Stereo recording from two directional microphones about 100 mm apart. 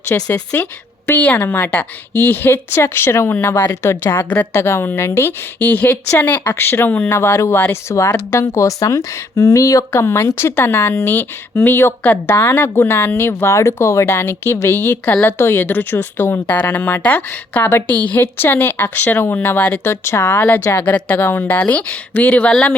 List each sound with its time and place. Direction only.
0.3 s speech: 20° left (ahead or behind)